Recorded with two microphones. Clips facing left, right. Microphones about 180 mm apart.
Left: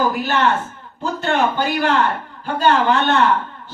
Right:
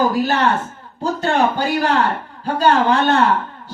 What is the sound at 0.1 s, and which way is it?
Speech, 35° right (ahead or behind).